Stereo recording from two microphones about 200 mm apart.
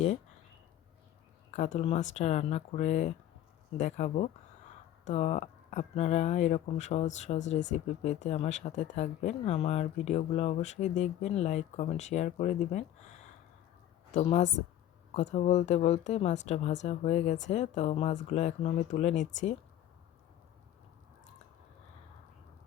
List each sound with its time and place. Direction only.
1.5 s speech: 35° left (ahead or behind)